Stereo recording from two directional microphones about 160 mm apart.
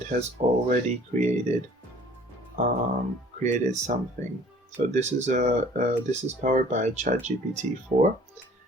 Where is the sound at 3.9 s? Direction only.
50° right (ahead or behind).